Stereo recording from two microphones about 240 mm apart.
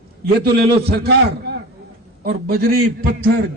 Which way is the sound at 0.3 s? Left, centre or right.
Right.